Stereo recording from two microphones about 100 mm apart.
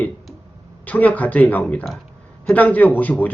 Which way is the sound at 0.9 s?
15° left (ahead or behind).